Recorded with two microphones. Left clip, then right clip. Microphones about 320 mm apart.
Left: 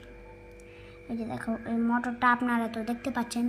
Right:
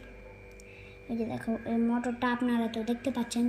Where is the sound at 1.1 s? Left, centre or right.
Centre.